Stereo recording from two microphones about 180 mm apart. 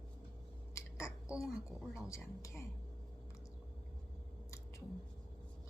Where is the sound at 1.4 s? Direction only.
Centre (ahead or behind).